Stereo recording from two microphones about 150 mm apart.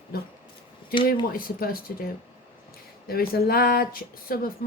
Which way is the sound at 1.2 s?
75° left (ahead or behind).